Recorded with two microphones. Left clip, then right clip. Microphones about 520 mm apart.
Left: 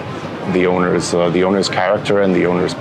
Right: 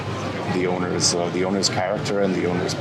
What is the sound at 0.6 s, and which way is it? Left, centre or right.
Speech, left.